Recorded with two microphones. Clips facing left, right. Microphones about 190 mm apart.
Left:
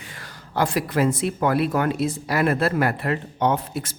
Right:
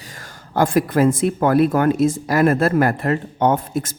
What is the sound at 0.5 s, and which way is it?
Speech, 50° right (ahead or behind).